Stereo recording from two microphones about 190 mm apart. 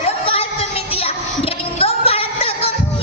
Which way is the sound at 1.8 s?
30° left (ahead or behind).